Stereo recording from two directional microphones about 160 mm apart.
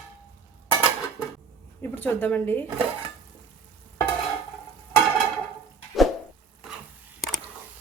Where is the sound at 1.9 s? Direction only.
10° left (ahead or behind).